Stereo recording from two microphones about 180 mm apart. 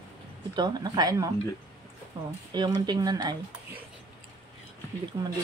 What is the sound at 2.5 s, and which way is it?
Speech, 25° right (ahead or behind).